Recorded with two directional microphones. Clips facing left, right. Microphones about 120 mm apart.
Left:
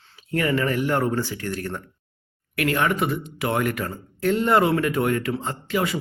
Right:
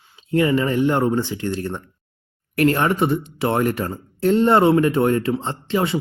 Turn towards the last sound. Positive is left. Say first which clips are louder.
# right 3 dB
turn(degrees=-30)  # may be behind; listen again after turning